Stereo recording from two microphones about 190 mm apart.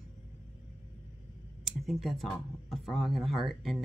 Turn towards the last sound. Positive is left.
turn(degrees=0)  # may be behind; listen again after turning